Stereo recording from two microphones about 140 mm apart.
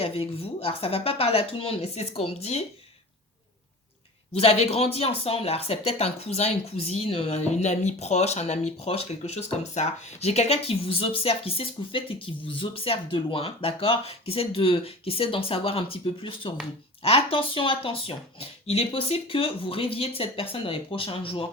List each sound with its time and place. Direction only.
0.0 s speech: 40° left (ahead or behind)
4.4 s speech: 45° left (ahead or behind)